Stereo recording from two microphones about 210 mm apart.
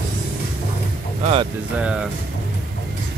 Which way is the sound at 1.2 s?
30° right (ahead or behind).